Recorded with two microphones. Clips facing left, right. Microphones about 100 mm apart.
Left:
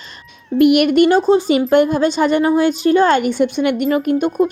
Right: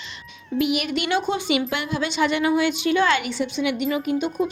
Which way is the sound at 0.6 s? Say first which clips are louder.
Left 13 dB; 60° left (ahead or behind).